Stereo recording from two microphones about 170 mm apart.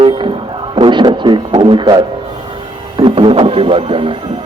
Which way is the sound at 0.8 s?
30° right (ahead or behind).